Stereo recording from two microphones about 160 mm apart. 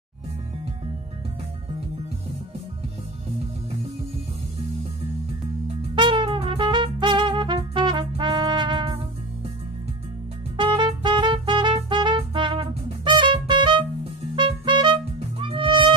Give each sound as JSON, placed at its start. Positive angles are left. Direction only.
{"t": 5.9, "sound": "music", "side_deg": -30}
{"t": 10.6, "sound": "music", "side_deg": -30}